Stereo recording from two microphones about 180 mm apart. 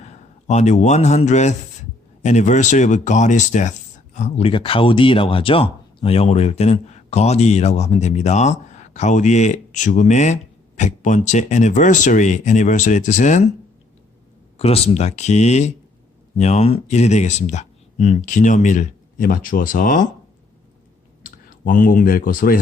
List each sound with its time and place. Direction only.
0.0 s a man's voice: 40° left (ahead or behind)
14.6 s speech: 35° left (ahead or behind)
21.2 s speech: 50° left (ahead or behind)